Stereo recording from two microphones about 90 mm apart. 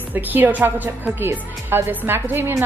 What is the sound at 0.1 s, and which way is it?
Speech, 20° right (ahead or behind).